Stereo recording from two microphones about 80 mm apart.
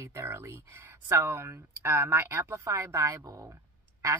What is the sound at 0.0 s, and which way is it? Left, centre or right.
Speech, right.